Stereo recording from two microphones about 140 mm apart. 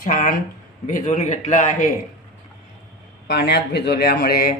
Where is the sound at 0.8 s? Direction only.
60° left (ahead or behind).